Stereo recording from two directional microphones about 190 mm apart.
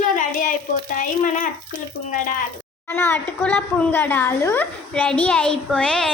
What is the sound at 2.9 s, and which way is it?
A woman's voice, 10° left (ahead or behind).